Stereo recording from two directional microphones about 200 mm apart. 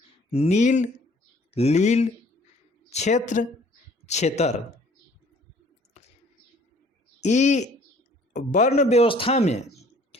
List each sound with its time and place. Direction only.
0.3 s a man's voice: 35° left (ahead or behind)
7.2 s a man's voice: 35° left (ahead or behind)